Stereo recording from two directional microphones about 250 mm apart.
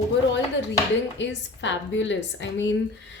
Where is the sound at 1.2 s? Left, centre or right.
Left.